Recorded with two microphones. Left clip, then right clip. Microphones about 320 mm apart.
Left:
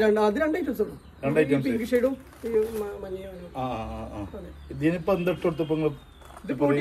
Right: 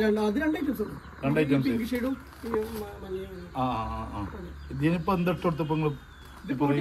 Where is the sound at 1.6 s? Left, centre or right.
Centre.